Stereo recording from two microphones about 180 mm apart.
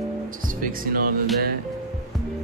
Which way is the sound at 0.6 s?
50° right (ahead or behind).